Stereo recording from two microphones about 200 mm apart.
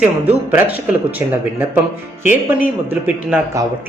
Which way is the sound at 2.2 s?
5° right (ahead or behind).